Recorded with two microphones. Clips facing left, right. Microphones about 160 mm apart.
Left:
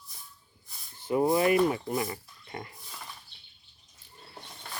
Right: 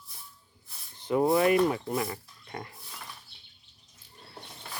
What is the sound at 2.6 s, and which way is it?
Mechanisms, centre (ahead or behind).